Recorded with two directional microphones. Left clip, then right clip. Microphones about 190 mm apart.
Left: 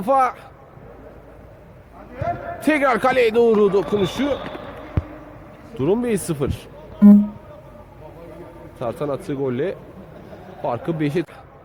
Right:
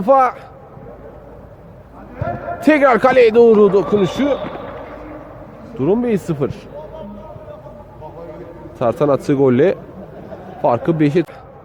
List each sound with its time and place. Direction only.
0.0 s a man's voice: centre (ahead or behind)
2.6 s a man's voice: centre (ahead or behind)
5.8 s a man's voice: 10° left (ahead or behind)
8.8 s a man's voice: 25° right (ahead or behind)
10.6 s a man's voice: 20° right (ahead or behind)